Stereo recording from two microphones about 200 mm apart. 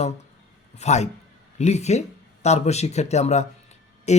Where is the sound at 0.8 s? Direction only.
35° left (ahead or behind).